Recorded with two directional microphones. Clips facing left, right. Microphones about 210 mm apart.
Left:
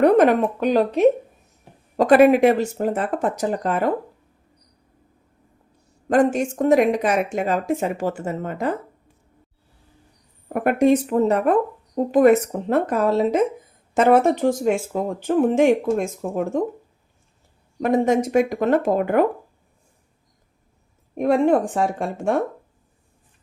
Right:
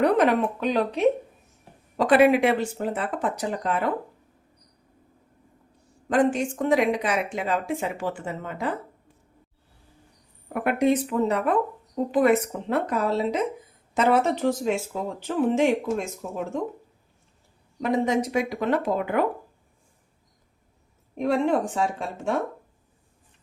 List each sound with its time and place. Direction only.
0.0 s speech: 50° left (ahead or behind)
6.1 s speech: 45° left (ahead or behind)
10.5 s speech: 45° left (ahead or behind)
17.7 s speech: 50° left (ahead or behind)
21.2 s speech: 50° left (ahead or behind)